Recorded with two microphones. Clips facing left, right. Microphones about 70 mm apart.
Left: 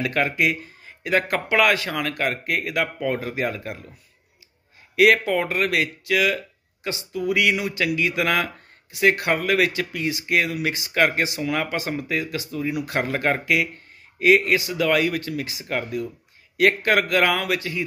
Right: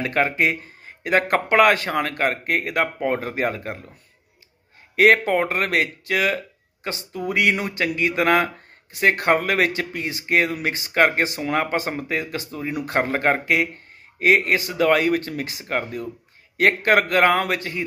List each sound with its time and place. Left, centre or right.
0.0 s speech: right
4.9 s speech: right